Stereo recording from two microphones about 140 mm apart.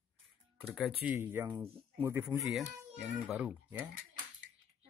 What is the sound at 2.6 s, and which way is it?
Speech, 5° right (ahead or behind).